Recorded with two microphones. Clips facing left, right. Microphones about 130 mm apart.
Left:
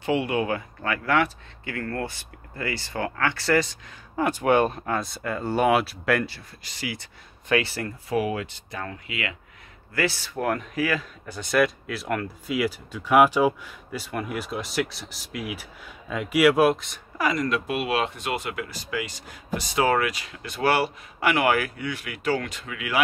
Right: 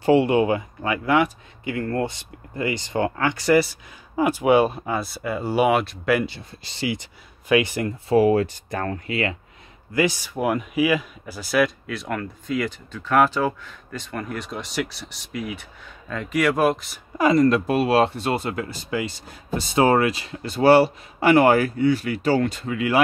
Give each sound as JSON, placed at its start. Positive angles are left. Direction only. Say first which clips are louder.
{"t": 0.0, "sound": "speech", "louder": "right 7 dB", "side_deg": -30}
{"t": 6.2, "sound": "speech", "louder": "right 4 dB", "side_deg": -25}
{"t": 7.0, "sound": "speech", "louder": "right 1 dB", "side_deg": -15}
{"t": 8.1, "sound": "speech", "louder": "right 9 dB", "side_deg": -35}
{"t": 9.9, "sound": "speech", "louder": "right 4 dB", "side_deg": -15}
{"t": 17.2, "sound": "speech", "louder": "right 8 dB", "side_deg": -30}